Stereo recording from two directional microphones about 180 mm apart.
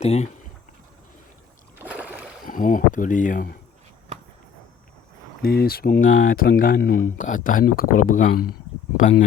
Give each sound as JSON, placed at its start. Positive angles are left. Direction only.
{"t": 0.0, "sound": "speech", "side_deg": 35}
{"t": 1.8, "sound": "rowboat", "side_deg": -10}
{"t": 2.5, "sound": "speech", "side_deg": 50}
{"t": 5.4, "sound": "speech", "side_deg": 55}